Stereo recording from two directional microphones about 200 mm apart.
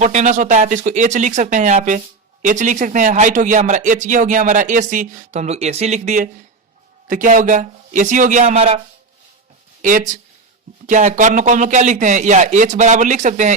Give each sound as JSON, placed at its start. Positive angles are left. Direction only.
{"t": 0.0, "sound": "speech", "side_deg": -35}
{"t": 9.8, "sound": "speech", "side_deg": -40}